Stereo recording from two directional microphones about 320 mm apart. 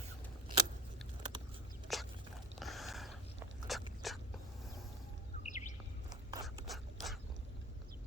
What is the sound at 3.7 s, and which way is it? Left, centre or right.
Biting, centre.